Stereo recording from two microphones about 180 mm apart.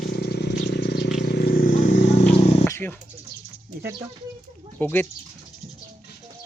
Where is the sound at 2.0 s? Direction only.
40° left (ahead or behind).